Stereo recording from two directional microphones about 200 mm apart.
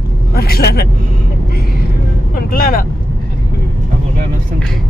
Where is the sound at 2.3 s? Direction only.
45° left (ahead or behind).